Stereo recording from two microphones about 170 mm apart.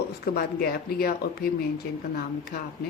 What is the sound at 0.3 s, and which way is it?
Speech, 65° left (ahead or behind).